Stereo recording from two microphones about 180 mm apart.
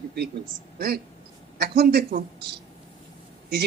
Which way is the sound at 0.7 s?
60° right (ahead or behind).